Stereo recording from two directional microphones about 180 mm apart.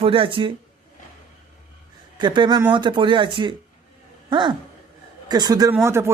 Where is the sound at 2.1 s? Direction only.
25° right (ahead or behind).